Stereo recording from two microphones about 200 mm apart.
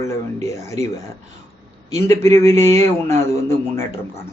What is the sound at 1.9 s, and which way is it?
Speech, 15° left (ahead or behind).